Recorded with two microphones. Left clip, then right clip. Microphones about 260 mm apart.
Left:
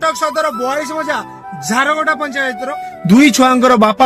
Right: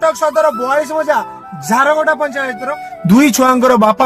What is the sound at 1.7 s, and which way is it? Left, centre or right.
Speech, right.